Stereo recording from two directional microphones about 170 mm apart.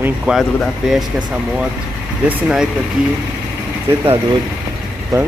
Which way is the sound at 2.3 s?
5° right (ahead or behind).